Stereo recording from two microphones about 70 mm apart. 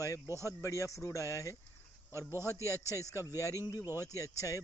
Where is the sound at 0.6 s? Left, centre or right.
Left.